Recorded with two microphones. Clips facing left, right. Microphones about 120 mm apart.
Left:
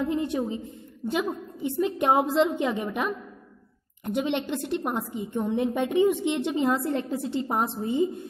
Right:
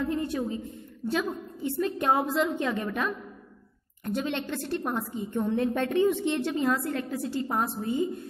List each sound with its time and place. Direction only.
0.0 s a woman's voice: 20° left (ahead or behind)